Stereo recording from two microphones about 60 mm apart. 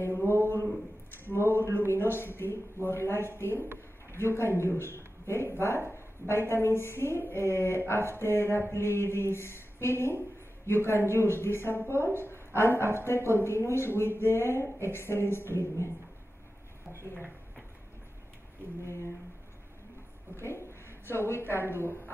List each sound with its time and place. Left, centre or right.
0.3 s speech: left
20.3 s speech: left